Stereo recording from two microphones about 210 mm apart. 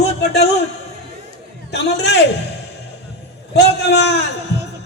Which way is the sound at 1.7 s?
55° left (ahead or behind).